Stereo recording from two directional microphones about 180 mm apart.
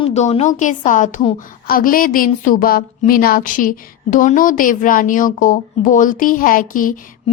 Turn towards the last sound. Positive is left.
turn(degrees=50)  # may be behind; listen again after turning